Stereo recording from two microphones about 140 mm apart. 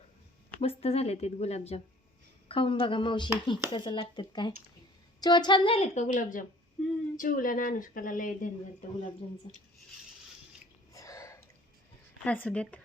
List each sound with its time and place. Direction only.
0.6 s a woman's voice: 45° left (ahead or behind); by 6.4 s 65° left (ahead or behind)
6.8 s a sound: centre (ahead or behind)
7.2 s speech: 80° left
9.5 s a woman's voice: 35° left (ahead or behind)
10.9 s a sound: 25° left (ahead or behind)
12.2 s speech: 10° left (ahead or behind)